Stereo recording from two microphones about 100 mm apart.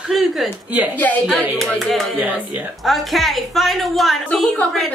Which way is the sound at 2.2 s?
15° right (ahead or behind).